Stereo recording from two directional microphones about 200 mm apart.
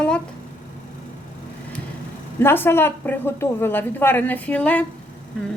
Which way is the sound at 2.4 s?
10° left (ahead or behind).